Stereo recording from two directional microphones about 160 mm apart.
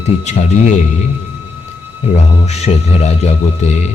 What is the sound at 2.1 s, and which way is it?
Speech, 40° left (ahead or behind).